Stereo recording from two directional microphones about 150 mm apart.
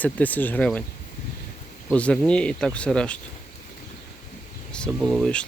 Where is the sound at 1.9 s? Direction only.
5° left (ahead or behind).